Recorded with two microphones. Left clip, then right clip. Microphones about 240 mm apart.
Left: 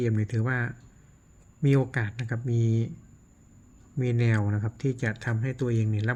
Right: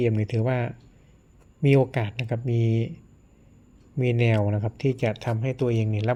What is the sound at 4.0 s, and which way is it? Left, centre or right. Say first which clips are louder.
Speech: right 5 dB; left.